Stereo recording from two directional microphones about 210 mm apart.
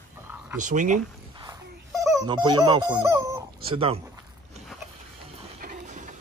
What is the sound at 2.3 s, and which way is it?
Speech, 20° right (ahead or behind).